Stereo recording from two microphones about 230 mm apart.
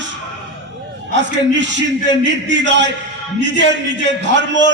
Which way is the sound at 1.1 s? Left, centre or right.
Right.